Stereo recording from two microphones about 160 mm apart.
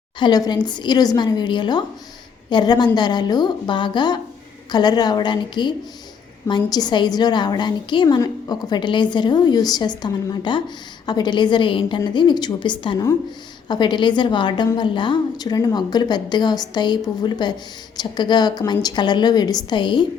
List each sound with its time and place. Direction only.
0.2 s a woman's voice: 25° left (ahead or behind)